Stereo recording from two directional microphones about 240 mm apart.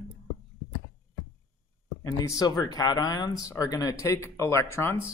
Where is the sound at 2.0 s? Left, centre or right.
Centre.